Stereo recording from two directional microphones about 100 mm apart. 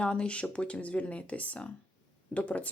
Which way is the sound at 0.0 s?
10° left (ahead or behind).